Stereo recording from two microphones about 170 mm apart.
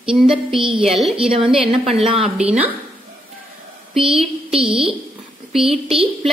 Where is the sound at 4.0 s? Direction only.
35° right (ahead or behind).